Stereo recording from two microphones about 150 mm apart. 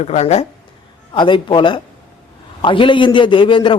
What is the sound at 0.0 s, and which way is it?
Speech, 45° left (ahead or behind).